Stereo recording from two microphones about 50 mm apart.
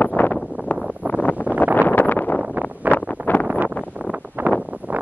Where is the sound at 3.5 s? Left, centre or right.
Right.